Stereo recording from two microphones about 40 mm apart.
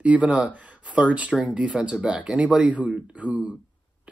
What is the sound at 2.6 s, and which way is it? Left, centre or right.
Speech, right.